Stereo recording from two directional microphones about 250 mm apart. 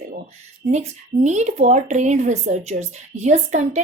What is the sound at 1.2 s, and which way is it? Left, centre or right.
Speech, right.